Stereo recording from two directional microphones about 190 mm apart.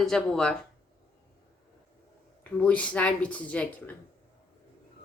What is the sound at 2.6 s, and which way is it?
Speech, 5° left (ahead or behind).